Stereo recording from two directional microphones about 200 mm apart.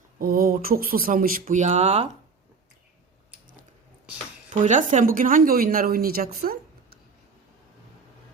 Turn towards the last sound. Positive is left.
turn(degrees=-50)  # may be behind; listen again after turning